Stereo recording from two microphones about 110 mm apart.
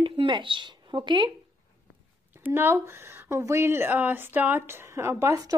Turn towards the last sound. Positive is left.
turn(degrees=-30)  # may be behind; listen again after turning